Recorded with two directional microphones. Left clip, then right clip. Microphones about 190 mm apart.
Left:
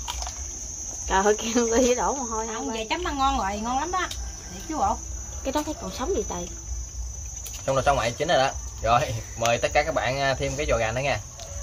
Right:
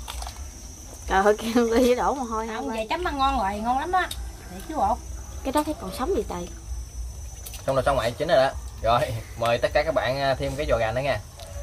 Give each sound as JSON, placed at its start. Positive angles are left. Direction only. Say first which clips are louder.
{"t": 1.0, "sound": "speech", "louder": "right 1 dB", "side_deg": -10}
{"t": 5.4, "sound": "speech", "louder": "right 3 dB", "side_deg": -15}
{"t": 7.6, "sound": "speech", "louder": "even", "side_deg": 15}